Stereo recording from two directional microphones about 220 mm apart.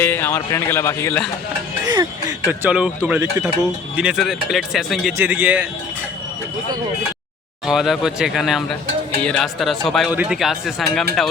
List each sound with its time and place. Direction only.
0.0 s speech: 10° left (ahead or behind)
2.5 s speech: 5° right (ahead or behind)
7.7 s speech: centre (ahead or behind)